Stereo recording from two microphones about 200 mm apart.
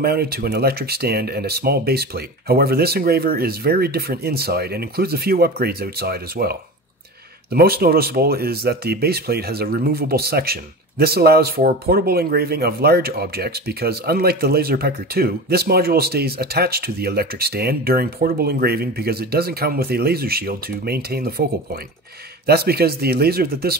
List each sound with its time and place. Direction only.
0.0 s speech: 50° right (ahead or behind)
22.5 s speech: 50° right (ahead or behind)